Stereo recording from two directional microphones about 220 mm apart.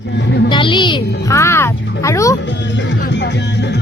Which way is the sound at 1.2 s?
15° left (ahead or behind).